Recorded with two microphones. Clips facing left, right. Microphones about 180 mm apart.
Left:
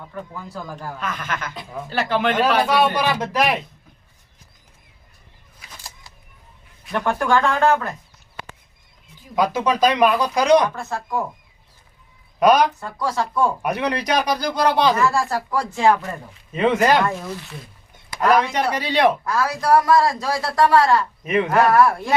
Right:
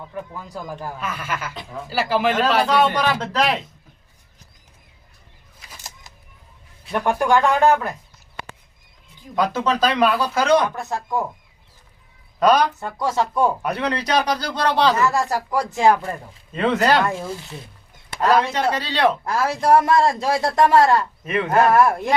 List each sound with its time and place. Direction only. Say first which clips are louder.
0.1 s speech: even; 15° right (ahead or behind)
2.6 s a man's voice: even; 10° left (ahead or behind)
6.9 s speech: right 1 dB; 15° right (ahead or behind)
9.3 s a man's voice: left 1 dB; 10° left (ahead or behind)
10.8 s speech: right 1 dB; 15° right (ahead or behind)
12.4 s a man's voice: left 1 dB; 10° left (ahead or behind)
12.8 s a man's voice: right 2 dB; 20° right (ahead or behind)
13.6 s a man's voice: left 1 dB; 10° left (ahead or behind)
15.1 s speech: right 1 dB; 15° right (ahead or behind)
16.5 s a man's voice: left 1 dB; 15° left (ahead or behind)
17.2 s a man's voice: right 1 dB; 30° right (ahead or behind)
18.2 s a man's voice: even; 15° left (ahead or behind)
19.2 s a man's voice: right 1 dB; 25° right (ahead or behind)